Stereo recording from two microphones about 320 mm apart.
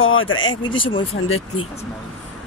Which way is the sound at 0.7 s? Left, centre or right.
Centre.